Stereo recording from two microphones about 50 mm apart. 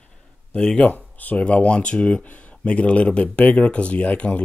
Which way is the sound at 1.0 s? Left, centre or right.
Left.